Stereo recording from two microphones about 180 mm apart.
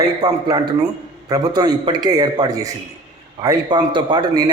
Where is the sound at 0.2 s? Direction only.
20° right (ahead or behind).